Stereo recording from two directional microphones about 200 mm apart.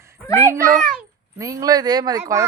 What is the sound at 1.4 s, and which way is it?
A woman's voice, 15° right (ahead or behind).